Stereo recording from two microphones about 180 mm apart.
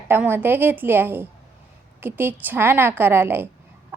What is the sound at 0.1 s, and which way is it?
A woman's voice, 10° right (ahead or behind).